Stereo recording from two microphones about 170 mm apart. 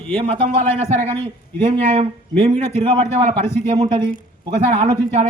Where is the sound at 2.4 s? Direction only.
30° right (ahead or behind).